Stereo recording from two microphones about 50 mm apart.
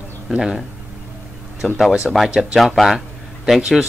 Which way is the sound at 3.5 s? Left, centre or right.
Centre.